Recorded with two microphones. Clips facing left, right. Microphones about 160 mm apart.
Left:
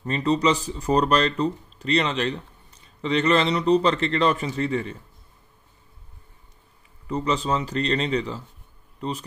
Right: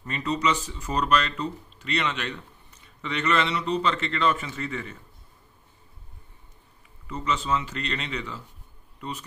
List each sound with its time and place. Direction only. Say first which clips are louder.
0.0 s speech: left 5 dB; 35° left (ahead or behind)
7.1 s speech: left 3 dB; 35° left (ahead or behind)